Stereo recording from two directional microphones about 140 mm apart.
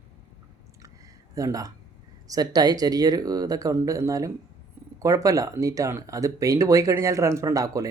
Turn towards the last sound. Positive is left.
turn(degrees=-25)  # may be behind; listen again after turning